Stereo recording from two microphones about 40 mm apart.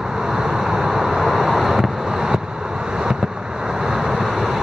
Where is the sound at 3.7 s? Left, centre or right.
Centre.